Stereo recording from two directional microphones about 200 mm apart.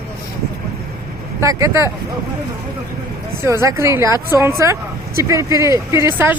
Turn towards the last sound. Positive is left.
turn(degrees=-10)  # may be behind; listen again after turning